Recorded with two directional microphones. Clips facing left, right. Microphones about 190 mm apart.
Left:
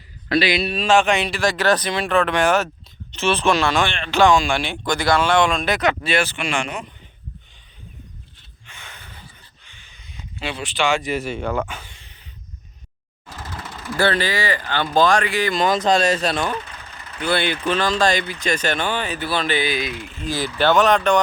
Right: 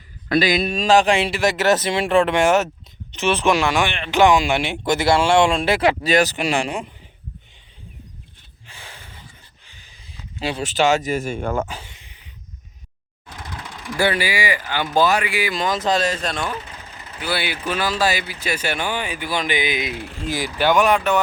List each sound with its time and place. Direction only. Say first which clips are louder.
0.3 s speech: right 1 dB; 45° right (ahead or behind)
8.6 s snort: right 1 dB; 30° right (ahead or behind)
9.6 s speech: even; 35° right (ahead or behind)
11.7 s a sound: right 1 dB; 25° right (ahead or behind)
13.2 s vehicle: left 1 dB; 5° left (ahead or behind)
13.7 s speech: left 1 dB; 15° right (ahead or behind)
15.6 s speech: left 3 dB; 60° left (ahead or behind)
16.6 s vehicle: right 1 dB; 20° right (ahead or behind)
17.2 s speech: left 4 dB; 5° right (ahead or behind)